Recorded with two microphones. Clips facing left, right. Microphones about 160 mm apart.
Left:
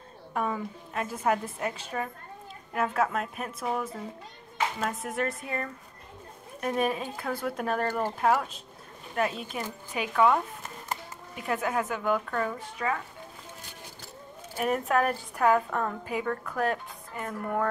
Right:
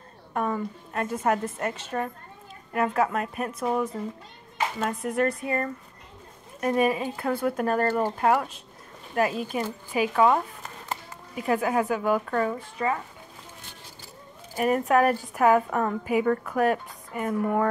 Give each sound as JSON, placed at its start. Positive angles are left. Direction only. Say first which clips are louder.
{"t": 0.3, "sound": "a woman's voice", "louder": "right 3 dB", "side_deg": 0}
{"t": 12.7, "sound": "speech", "louder": "right 2 dB", "side_deg": -30}
{"t": 14.6, "sound": "a woman's voice", "louder": "right 5 dB", "side_deg": 0}